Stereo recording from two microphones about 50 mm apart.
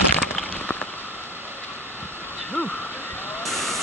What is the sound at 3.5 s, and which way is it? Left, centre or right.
Static, centre.